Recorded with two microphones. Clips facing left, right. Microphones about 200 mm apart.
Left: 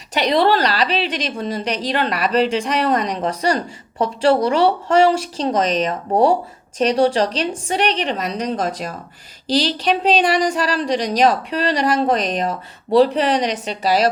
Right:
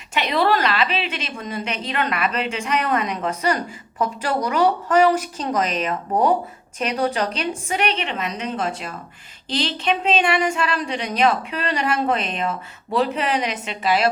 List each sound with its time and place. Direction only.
0.1 s a woman's voice: 35° left (ahead or behind)